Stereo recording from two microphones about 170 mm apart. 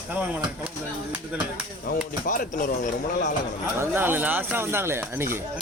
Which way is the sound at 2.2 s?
55° left (ahead or behind).